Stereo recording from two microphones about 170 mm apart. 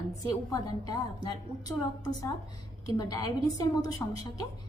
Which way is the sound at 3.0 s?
20° left (ahead or behind).